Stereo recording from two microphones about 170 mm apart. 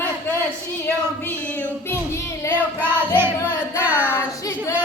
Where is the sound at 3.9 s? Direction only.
10° left (ahead or behind).